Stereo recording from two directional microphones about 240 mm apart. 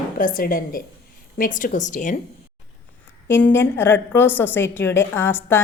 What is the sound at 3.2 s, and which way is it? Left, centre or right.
A woman's voice, centre.